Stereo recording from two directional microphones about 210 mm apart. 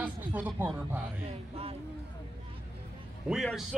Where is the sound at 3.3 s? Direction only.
Centre (ahead or behind).